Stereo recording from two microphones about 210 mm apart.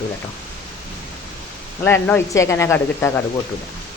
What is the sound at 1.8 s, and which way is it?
Speech, 10° left (ahead or behind).